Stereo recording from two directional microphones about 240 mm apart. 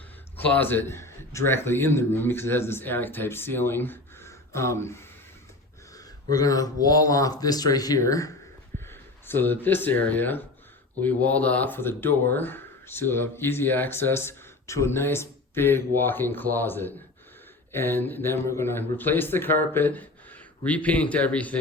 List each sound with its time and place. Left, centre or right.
0.3 s speech: centre
6.3 s speech: centre